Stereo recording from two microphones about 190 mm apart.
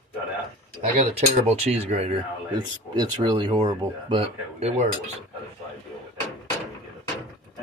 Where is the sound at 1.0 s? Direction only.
35° right (ahead or behind).